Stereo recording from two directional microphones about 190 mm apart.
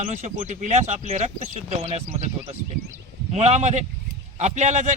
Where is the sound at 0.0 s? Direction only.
35° right (ahead or behind).